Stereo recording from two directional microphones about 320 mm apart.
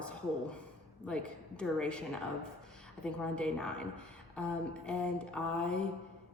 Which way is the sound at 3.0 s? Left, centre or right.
Centre.